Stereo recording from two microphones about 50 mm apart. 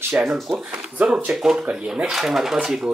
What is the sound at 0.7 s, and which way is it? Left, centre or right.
Speech, right.